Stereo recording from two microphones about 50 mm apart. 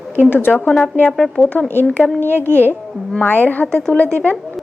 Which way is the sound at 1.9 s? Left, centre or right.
Left.